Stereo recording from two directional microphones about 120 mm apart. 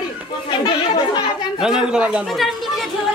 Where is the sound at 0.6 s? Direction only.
40° left (ahead or behind).